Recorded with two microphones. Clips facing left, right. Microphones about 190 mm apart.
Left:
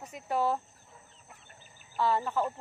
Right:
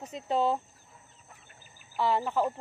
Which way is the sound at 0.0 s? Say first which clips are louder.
Right 2 dB; 20° right (ahead or behind).